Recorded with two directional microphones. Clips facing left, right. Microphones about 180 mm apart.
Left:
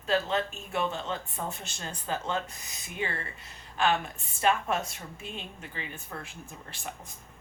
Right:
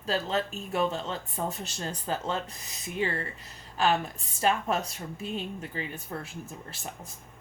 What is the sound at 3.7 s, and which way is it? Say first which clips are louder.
A woman's voice: right 1 dB; 35° right (ahead or behind).